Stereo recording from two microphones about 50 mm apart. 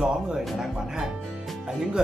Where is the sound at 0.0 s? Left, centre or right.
Centre.